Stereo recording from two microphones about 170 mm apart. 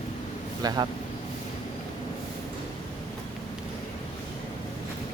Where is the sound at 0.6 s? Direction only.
20° right (ahead or behind).